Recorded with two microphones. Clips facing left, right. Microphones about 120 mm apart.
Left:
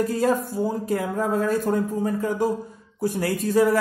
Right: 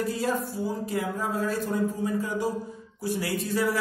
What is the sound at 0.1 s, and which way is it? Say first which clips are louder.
Speech: left 6 dB; 50° left (ahead or behind).